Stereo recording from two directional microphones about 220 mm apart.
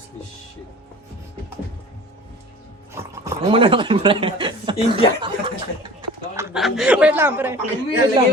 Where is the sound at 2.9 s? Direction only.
15° right (ahead or behind).